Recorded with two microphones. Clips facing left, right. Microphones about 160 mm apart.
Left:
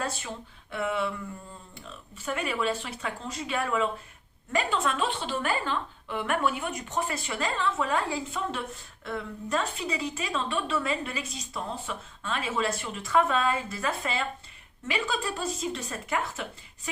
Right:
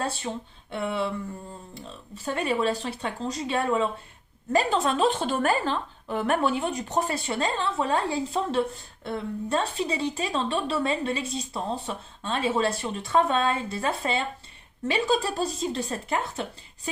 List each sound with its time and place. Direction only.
0.0 s a woman's voice: 30° right (ahead or behind)